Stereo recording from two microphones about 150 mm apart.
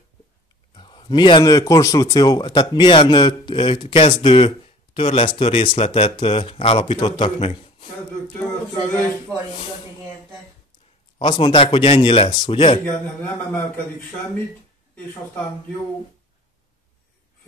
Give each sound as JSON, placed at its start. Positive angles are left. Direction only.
{"t": 0.7, "sound": "speech", "side_deg": 35}
{"t": 11.1, "sound": "speech", "side_deg": 30}
{"t": 13.2, "sound": "a man's voice", "side_deg": 10}